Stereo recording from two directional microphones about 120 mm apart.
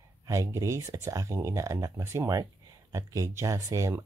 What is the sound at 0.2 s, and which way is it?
Speech, 25° right (ahead or behind).